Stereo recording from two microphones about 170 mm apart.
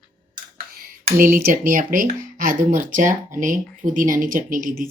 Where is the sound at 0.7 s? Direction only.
60° right (ahead or behind).